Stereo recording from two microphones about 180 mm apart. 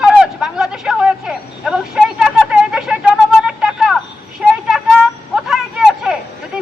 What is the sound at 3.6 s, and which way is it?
Vehicle, 5° right (ahead or behind).